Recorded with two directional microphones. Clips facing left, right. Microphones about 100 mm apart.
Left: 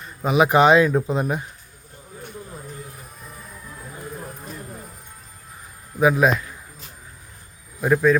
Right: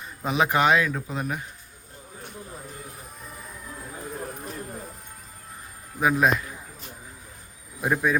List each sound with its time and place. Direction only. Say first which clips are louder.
0.3 s speech: left 6 dB; 15° left (ahead or behind)
6.0 s speech: left 4 dB; 5° left (ahead or behind)
7.8 s speech: left 6 dB; 10° right (ahead or behind)